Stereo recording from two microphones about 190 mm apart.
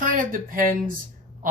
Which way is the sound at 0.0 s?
45° right (ahead or behind).